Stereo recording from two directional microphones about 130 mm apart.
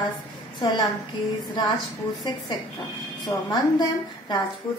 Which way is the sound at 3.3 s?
30° left (ahead or behind).